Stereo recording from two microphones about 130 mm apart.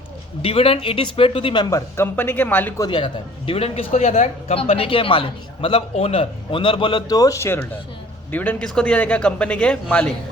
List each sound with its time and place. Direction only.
0.4 s speech: 45° left (ahead or behind)
1.7 s a man's voice: 20° left (ahead or behind)
2.8 s a man's voice: 40° left (ahead or behind); by 10.1 s 10° left (ahead or behind)